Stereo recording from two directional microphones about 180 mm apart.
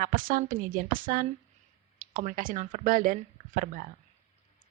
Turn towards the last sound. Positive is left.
turn(degrees=-50)  # may be behind; listen again after turning